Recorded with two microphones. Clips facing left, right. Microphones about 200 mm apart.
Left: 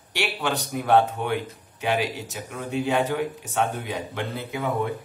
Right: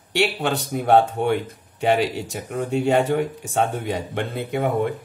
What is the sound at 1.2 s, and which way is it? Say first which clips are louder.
Speech: right 7 dB; 65° right (ahead or behind).